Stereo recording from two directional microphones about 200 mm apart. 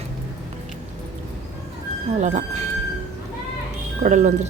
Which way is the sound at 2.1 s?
35° right (ahead or behind).